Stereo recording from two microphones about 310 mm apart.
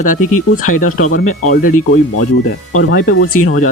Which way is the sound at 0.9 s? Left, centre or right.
Left.